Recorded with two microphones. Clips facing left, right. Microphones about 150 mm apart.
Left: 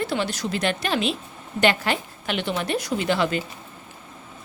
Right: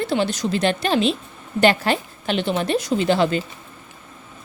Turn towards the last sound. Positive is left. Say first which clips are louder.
# right 4 dB
turn(degrees=-30)  # may be behind; listen again after turning